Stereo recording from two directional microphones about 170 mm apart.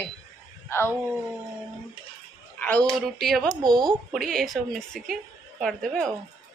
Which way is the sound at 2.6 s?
10° left (ahead or behind).